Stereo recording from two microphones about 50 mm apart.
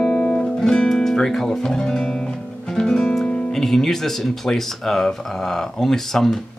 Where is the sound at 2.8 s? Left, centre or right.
Centre.